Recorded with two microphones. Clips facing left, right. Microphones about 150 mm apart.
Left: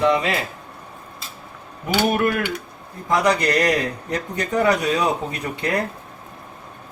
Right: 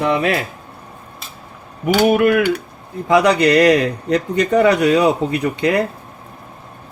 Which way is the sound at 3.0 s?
70° right (ahead or behind).